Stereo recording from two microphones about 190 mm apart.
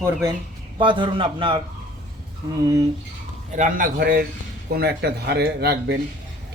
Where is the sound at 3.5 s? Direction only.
45° right (ahead or behind).